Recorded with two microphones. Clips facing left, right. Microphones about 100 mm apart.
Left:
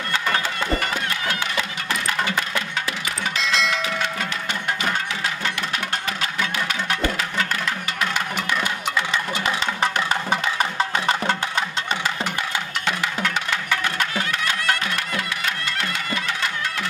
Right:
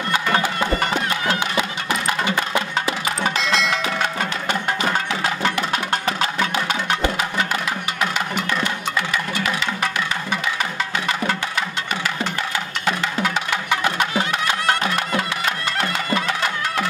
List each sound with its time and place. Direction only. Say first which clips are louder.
0.9 s run: right 4 dB; 30° right (ahead or behind)
1.9 s music: right 3 dB; 20° right (ahead or behind)
3.3 s a sound: right 2 dB; centre (ahead or behind)
3.7 s music: right 3 dB; 45° right (ahead or behind)
6.5 s music: right 3 dB; 25° right (ahead or behind)
10.6 s music: left 2 dB; 30° left (ahead or behind)
12.8 s music: right 4 dB; 10° right (ahead or behind)
14.7 s music: right 4 dB; 30° right (ahead or behind)